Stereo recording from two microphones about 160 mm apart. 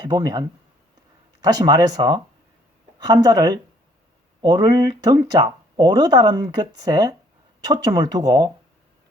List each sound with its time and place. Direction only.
0.0 s speech: 25° right (ahead or behind)
1.5 s speech: 25° right (ahead or behind)